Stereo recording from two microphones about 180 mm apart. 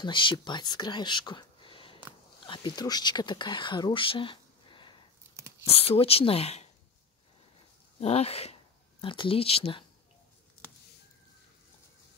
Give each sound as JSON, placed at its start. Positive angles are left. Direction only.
{"t": 0.0, "sound": "speech", "side_deg": 25}
{"t": 5.3, "sound": "whispering", "side_deg": -15}
{"t": 5.7, "sound": "speech", "side_deg": 30}
{"t": 8.0, "sound": "speech", "side_deg": 35}